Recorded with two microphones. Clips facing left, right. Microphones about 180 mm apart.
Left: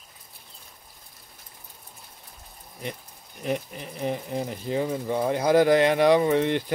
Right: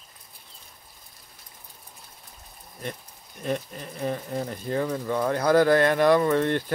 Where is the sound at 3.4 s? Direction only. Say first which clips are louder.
Even; 15° left (ahead or behind).